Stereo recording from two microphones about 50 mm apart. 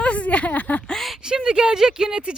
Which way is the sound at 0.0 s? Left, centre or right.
Left.